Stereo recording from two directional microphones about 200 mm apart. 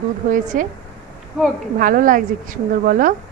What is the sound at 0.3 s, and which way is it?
Speech, 40° right (ahead or behind).